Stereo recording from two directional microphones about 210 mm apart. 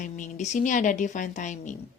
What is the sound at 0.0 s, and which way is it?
A woman's voice, 35° left (ahead or behind).